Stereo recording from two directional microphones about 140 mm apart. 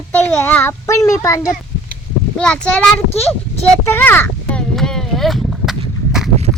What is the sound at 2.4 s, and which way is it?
A child's voice, 10° left (ahead or behind).